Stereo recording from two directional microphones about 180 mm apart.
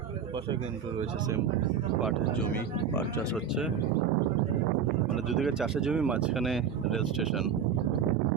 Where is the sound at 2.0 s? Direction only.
Centre (ahead or behind).